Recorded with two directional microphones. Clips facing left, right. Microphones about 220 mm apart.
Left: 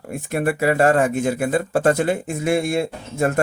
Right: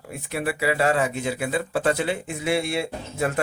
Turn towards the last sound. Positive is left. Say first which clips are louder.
# left 5 dB
turn(degrees=45)  # may be behind; listen again after turning